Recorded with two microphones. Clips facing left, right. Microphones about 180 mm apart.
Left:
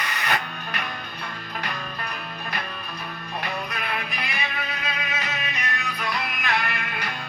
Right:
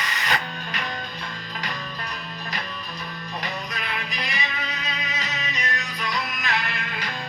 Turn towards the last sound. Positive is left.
turn(degrees=55)  # may be behind; listen again after turning